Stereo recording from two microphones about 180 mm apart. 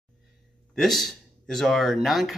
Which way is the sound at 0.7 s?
Centre (ahead or behind).